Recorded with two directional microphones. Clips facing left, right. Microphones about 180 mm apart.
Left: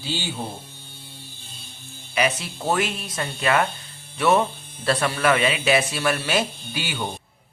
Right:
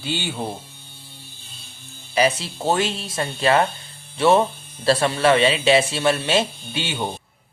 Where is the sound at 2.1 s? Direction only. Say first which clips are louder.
Right 4 dB; 30° right (ahead or behind).